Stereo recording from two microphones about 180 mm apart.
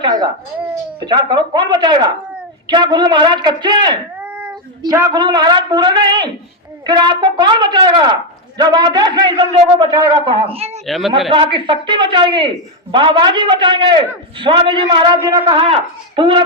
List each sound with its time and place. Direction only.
0.0 s a woman's voice: 20° right (ahead or behind)
4.2 s cat: 5° right (ahead or behind)
4.8 s a woman's voice: 20° right (ahead or behind)
10.8 s speech: centre (ahead or behind)
11.3 s a woman's voice: 30° right (ahead or behind)